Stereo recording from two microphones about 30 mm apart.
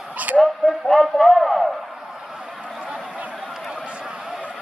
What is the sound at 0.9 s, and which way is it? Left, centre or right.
Speech, centre.